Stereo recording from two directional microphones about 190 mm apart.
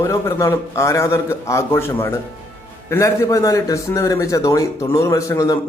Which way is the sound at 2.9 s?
15° left (ahead or behind).